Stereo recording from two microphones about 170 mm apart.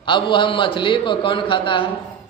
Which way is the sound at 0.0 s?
30° left (ahead or behind).